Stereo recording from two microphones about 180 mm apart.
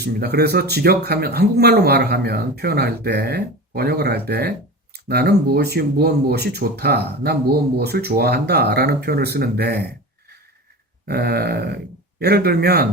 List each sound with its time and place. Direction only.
0.0 s speech: 60° right (ahead or behind)
11.0 s speech: 60° right (ahead or behind)